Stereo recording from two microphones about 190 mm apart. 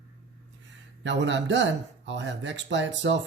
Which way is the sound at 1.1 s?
70° right (ahead or behind).